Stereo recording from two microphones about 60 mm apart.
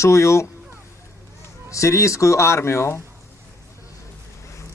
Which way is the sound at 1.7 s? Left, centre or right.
Left.